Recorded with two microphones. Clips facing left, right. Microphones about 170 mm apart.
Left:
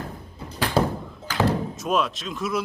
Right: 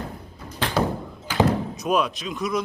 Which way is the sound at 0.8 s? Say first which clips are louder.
Left 1 dB; 25° left (ahead or behind).